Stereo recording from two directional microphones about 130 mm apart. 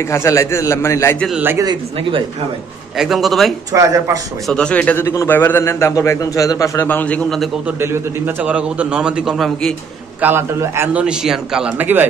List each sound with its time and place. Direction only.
0.0 s a man's voice: 20° left (ahead or behind)
2.0 s speech: 40° right (ahead or behind)
3.0 s a man's voice: centre (ahead or behind)
3.7 s speech: 25° right (ahead or behind)
4.5 s a man's voice: 5° left (ahead or behind)
5.0 s a man's voice: 25° left (ahead or behind); by 7.4 s 5° left (ahead or behind)
7.8 s a man's voice: 20° right (ahead or behind); by 9.8 s 5° left (ahead or behind)
10.2 s a man's voice: 20° right (ahead or behind)
10.9 s a man's voice: 10° right (ahead or behind)